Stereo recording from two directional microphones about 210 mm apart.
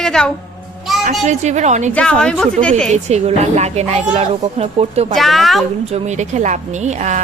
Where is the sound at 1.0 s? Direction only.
35° right (ahead or behind).